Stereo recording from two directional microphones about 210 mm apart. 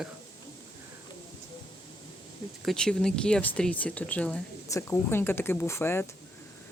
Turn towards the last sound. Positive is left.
turn(degrees=10)  # may be behind; listen again after turning